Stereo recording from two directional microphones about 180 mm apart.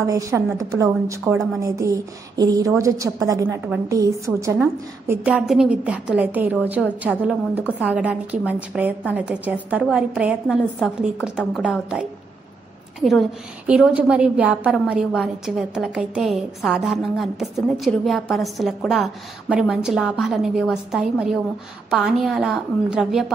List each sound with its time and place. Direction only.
0.0 s a woman's voice: 15° right (ahead or behind)
13.0 s a woman's voice: centre (ahead or behind)